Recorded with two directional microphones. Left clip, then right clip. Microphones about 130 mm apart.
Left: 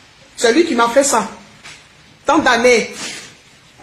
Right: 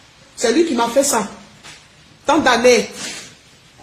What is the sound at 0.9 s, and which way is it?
Speech, centre (ahead or behind).